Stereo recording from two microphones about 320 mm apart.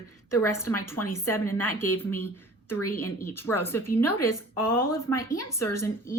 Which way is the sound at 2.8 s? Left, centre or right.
Left.